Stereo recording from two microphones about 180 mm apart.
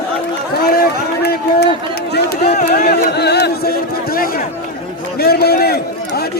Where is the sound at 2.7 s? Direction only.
60° left (ahead or behind).